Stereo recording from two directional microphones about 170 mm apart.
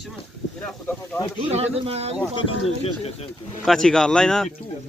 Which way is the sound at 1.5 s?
35° right (ahead or behind).